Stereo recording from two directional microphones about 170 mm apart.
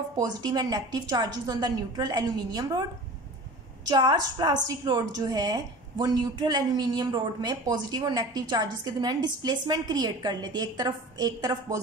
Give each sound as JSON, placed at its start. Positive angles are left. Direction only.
{"t": 0.2, "sound": "a woman's voice", "side_deg": -25}
{"t": 3.9, "sound": "a woman's voice", "side_deg": -25}